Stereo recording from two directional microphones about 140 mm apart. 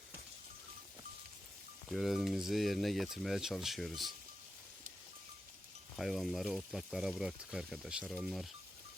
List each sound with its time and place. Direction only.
1.9 s speech: centre (ahead or behind)
6.0 s speech: centre (ahead or behind)